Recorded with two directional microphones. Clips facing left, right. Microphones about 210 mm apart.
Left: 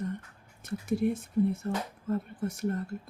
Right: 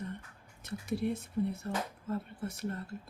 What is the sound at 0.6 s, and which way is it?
Speech, 50° left (ahead or behind).